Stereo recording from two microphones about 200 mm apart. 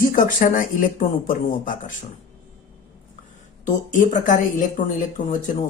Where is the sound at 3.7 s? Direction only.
40° left (ahead or behind).